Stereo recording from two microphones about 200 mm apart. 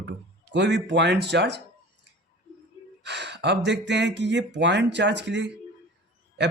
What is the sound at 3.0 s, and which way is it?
Speech, 60° right (ahead or behind).